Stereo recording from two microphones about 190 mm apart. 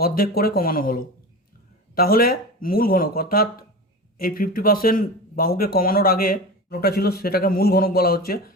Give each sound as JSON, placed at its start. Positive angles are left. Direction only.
{"t": 0.0, "sound": "speech", "side_deg": 50}